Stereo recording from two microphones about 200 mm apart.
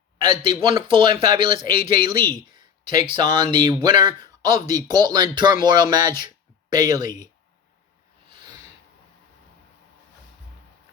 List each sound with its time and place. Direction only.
0.2 s speech: 25° right (ahead or behind)